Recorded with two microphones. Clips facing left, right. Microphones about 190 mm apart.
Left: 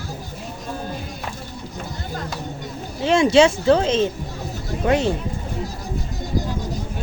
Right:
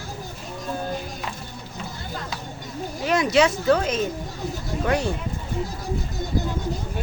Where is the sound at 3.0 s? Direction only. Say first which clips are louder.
Left 5 dB; 25° left (ahead or behind).